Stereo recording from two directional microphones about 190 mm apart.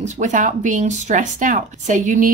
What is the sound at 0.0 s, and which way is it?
Speech, 40° right (ahead or behind).